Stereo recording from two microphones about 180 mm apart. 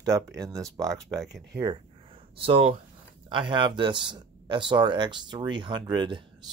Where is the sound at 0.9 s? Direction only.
Centre (ahead or behind).